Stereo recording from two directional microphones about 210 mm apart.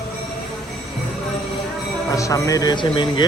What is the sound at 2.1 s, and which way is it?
A man's voice, 15° left (ahead or behind).